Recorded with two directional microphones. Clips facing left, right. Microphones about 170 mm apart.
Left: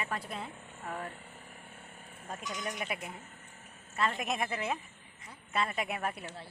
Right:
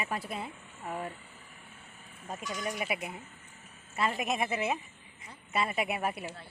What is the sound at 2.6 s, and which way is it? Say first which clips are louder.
Speech: right 4 dB; 5° right (ahead or behind).